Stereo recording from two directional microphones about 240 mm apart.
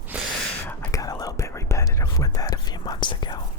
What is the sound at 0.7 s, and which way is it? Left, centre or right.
Whispering, centre.